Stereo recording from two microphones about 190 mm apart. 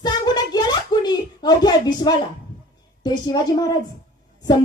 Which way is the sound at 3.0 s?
20° left (ahead or behind).